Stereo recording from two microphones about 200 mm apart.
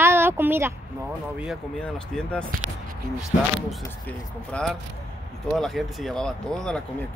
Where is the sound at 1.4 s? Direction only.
Centre (ahead or behind).